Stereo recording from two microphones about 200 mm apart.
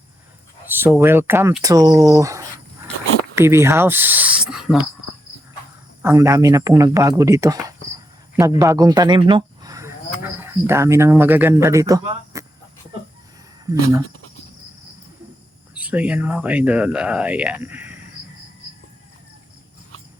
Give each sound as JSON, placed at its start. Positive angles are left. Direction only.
{"t": 0.7, "sound": "speech", "side_deg": -10}
{"t": 6.0, "sound": "speech", "side_deg": -15}
{"t": 12.3, "sound": "a sound", "side_deg": -15}
{"t": 15.7, "sound": "speech", "side_deg": -5}